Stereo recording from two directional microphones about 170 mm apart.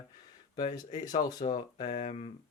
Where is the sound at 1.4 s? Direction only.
40° left (ahead or behind).